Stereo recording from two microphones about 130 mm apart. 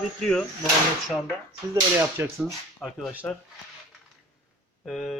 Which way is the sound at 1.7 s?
20° right (ahead or behind).